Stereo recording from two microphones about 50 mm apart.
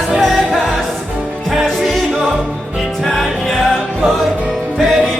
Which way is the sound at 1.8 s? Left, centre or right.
Centre.